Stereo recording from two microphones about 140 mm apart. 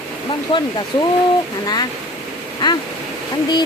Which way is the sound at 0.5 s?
35° left (ahead or behind).